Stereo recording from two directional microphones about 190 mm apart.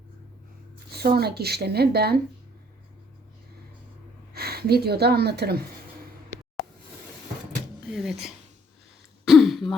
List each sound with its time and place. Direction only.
0.9 s speech: 55° right (ahead or behind)
4.4 s speech: 55° right (ahead or behind)
7.9 s speech: centre (ahead or behind)
9.2 s throat clearing: centre (ahead or behind)